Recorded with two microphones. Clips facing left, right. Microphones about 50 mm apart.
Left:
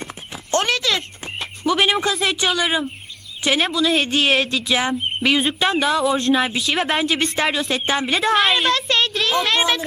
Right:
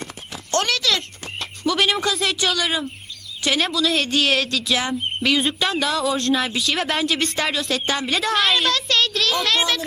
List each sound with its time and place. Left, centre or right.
0.0 s clip-clop: centre
1.2 s a sound: centre
2.0 s speech: centre
4.0 s speech: centre
4.3 s speech: centre
7.7 s speech: centre
9.0 s a sound: centre